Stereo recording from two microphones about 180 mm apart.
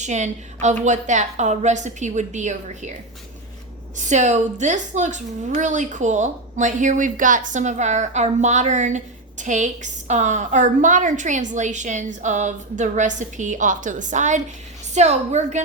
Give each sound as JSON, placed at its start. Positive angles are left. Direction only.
{"t": 0.0, "sound": "a woman's voice", "side_deg": -40}
{"t": 3.9, "sound": "a woman's voice", "side_deg": -40}